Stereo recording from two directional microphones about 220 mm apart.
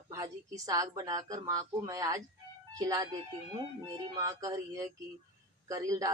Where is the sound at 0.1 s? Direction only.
15° right (ahead or behind).